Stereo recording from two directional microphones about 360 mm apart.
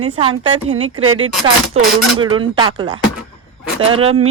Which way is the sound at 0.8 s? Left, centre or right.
Right.